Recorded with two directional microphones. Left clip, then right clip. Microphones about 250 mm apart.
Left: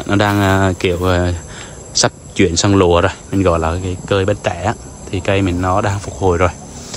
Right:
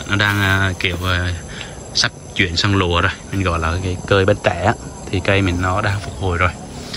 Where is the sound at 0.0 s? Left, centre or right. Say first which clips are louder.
Left 2 dB; centre.